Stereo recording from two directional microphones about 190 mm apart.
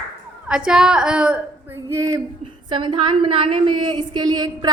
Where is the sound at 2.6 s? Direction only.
25° right (ahead or behind).